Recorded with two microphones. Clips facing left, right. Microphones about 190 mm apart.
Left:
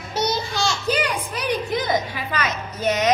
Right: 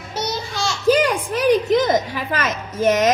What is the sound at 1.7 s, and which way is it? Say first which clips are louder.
A woman's voice: right 5 dB; 45° right (ahead or behind).